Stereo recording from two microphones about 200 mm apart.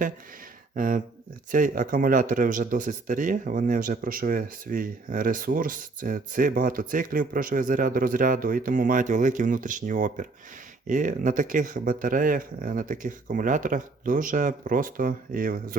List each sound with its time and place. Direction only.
0.8 s speech: 45° right (ahead or behind)